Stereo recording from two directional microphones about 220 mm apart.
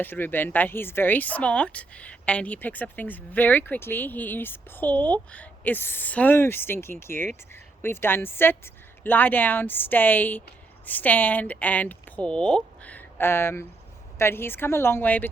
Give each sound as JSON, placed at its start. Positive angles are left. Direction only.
{"t": 0.0, "sound": "speech", "side_deg": 10}